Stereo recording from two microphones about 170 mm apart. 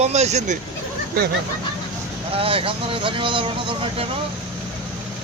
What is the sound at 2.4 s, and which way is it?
Speech, 35° right (ahead or behind).